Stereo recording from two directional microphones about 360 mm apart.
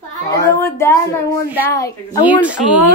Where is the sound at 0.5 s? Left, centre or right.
Centre.